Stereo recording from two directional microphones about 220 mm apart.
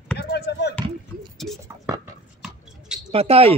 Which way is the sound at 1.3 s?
Centre (ahead or behind).